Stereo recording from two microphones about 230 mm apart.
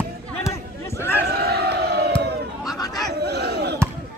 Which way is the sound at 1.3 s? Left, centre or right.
Right.